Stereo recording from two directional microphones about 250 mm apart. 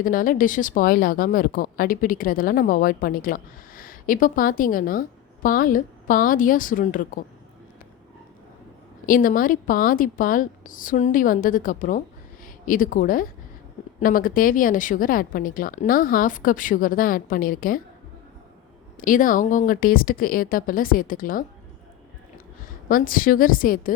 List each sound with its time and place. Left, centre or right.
0.0 s speech: left
9.0 s speech: left
18.9 s speech: left
22.9 s speech: left